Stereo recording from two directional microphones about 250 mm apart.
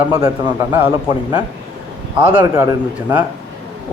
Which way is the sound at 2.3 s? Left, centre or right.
Centre.